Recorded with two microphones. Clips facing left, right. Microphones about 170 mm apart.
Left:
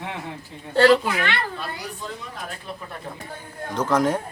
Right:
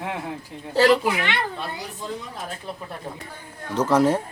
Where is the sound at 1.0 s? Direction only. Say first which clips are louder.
Right 1 dB; 20° right (ahead or behind).